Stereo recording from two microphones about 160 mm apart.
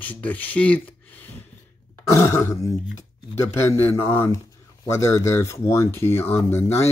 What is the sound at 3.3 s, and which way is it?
A man's voice, 15° left (ahead or behind).